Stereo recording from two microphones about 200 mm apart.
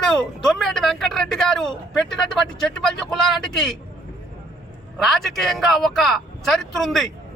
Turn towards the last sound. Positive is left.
turn(degrees=0)  # may be behind; listen again after turning